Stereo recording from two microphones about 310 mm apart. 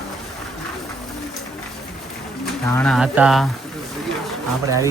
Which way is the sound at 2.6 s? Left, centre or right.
Centre.